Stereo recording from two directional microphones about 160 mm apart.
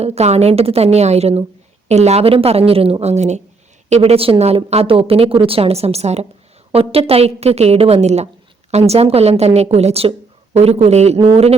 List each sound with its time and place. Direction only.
0.0 s speech: 40° right (ahead or behind)